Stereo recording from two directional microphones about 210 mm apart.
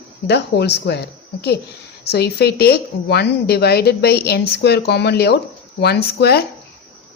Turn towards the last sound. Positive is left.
turn(degrees=50)  # may be behind; listen again after turning